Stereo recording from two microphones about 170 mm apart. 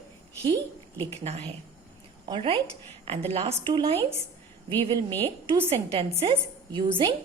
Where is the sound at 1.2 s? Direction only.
35° right (ahead or behind).